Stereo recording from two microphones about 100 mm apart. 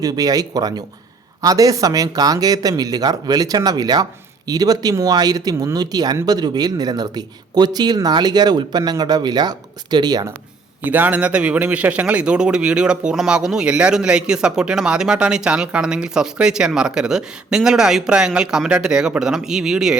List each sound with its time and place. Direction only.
0.0 s speech: 40° right (ahead or behind)
10.8 s a man's voice: 15° right (ahead or behind)